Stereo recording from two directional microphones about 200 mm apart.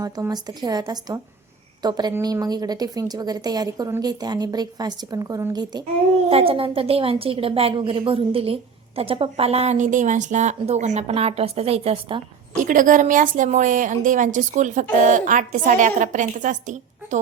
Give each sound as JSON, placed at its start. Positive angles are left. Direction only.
{"t": 0.0, "sound": "a woman's voice", "side_deg": -20}
{"t": 12.5, "sound": "a woman's voice", "side_deg": -40}